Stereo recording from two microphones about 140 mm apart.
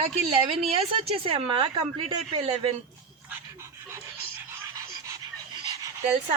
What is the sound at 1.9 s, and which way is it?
Speech, 45° right (ahead or behind).